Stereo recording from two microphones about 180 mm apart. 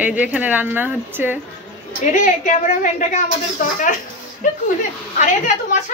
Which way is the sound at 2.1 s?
45° left (ahead or behind).